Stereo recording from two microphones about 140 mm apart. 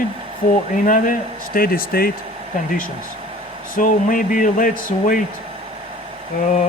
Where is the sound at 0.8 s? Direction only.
70° left (ahead or behind).